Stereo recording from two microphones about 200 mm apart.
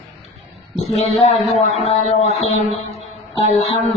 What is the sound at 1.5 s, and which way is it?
Music, 30° left (ahead or behind).